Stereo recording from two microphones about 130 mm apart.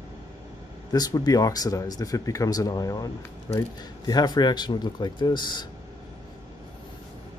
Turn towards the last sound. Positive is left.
turn(degrees=35)  # may be behind; listen again after turning